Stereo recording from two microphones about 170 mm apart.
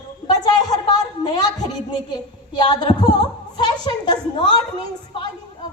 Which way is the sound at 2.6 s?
25° left (ahead or behind).